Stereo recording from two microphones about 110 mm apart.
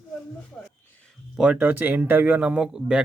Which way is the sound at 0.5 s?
15° left (ahead or behind).